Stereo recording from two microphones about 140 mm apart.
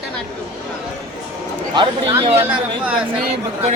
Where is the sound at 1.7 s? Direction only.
35° right (ahead or behind).